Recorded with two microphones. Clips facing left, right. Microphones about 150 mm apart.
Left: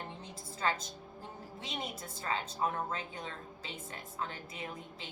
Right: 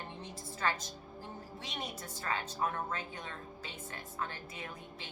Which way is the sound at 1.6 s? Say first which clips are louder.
Left 2 dB; 25° left (ahead or behind).